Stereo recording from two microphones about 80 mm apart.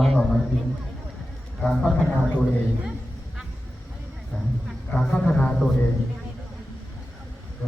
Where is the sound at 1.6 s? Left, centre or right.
Centre.